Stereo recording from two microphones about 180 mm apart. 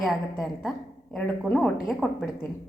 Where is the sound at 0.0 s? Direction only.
Centre (ahead or behind).